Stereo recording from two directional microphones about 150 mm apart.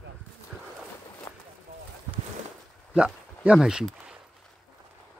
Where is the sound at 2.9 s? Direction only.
5° right (ahead or behind).